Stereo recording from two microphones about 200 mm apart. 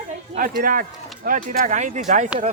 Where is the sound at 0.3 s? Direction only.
45° right (ahead or behind).